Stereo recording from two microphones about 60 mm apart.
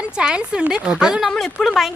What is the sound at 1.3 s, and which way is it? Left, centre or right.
Speech, centre.